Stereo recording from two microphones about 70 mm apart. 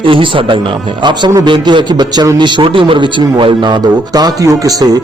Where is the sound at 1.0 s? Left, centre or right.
Right.